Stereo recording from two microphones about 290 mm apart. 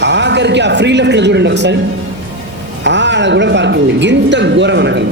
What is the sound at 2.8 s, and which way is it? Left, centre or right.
A man's voice, right.